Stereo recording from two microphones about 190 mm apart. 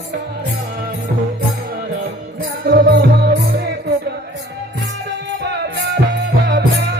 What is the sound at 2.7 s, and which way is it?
Music, 60° right (ahead or behind).